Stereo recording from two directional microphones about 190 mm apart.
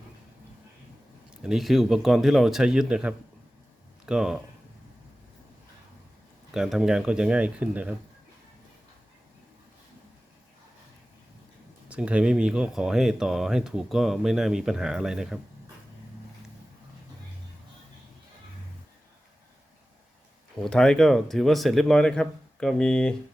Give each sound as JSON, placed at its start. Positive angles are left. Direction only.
{"t": 1.5, "sound": "speech", "side_deg": 0}
{"t": 6.5, "sound": "speech", "side_deg": 0}
{"t": 11.9, "sound": "speech", "side_deg": -5}
{"t": 20.7, "sound": "speech", "side_deg": 5}